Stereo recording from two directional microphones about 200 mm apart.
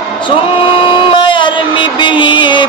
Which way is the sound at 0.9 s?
25° left (ahead or behind).